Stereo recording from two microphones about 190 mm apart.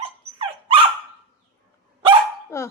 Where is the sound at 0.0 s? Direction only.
25° right (ahead or behind).